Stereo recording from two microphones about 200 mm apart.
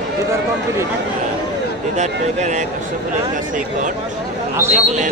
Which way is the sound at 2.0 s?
35° right (ahead or behind).